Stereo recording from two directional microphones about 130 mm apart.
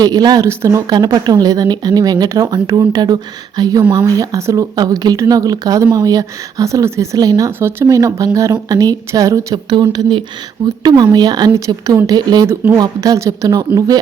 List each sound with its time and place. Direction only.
0.0 s a woman's voice: 30° right (ahead or behind)
12.5 s a woman's voice: 20° right (ahead or behind)